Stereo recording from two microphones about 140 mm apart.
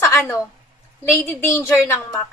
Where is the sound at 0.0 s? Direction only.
20° left (ahead or behind).